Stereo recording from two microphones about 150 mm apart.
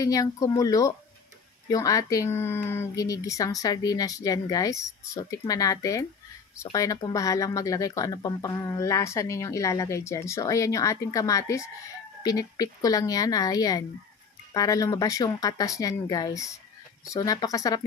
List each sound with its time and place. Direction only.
0.0 s speech: 25° left (ahead or behind)